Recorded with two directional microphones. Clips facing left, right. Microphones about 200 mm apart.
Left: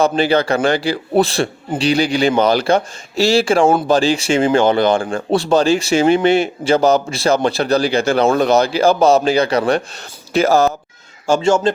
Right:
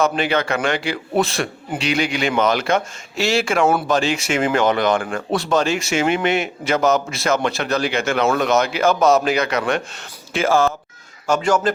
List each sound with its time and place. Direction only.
0.0 s a man's voice: 35° left (ahead or behind)
11.3 s speech: 25° left (ahead or behind)